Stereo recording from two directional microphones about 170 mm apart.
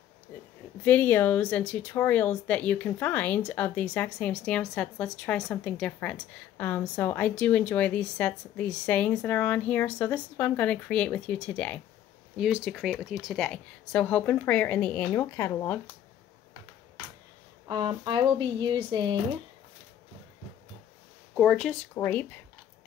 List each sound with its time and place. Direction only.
0.8 s speech: 10° left (ahead or behind)
12.4 s speech: 5° right (ahead or behind); by 15.8 s 15° left (ahead or behind)
17.6 s speech: 25° right (ahead or behind)
21.4 s speech: centre (ahead or behind)
21.9 s speech: 10° left (ahead or behind)